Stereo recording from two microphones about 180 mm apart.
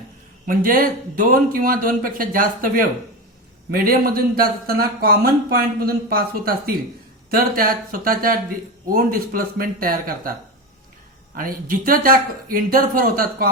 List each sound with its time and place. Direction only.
0.4 s speech: 50° right (ahead or behind)
11.3 s speech: 50° right (ahead or behind)